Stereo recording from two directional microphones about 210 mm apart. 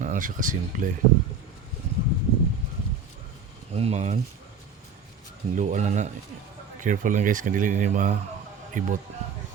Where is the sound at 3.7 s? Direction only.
30° right (ahead or behind).